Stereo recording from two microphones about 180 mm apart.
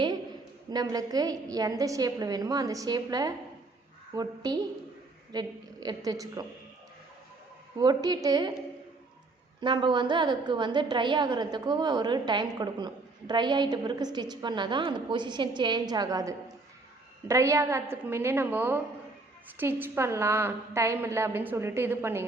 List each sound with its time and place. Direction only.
0.7 s a woman's voice: 20° right (ahead or behind)
7.8 s a woman's voice: 20° right (ahead or behind)
9.6 s a woman's voice: 25° right (ahead or behind)